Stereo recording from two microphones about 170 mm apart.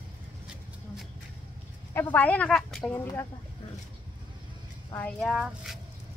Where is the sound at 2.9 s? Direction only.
15° left (ahead or behind).